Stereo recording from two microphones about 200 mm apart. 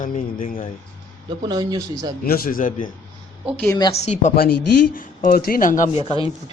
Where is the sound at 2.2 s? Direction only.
50° left (ahead or behind).